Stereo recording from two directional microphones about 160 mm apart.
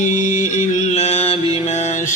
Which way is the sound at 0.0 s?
50° left (ahead or behind).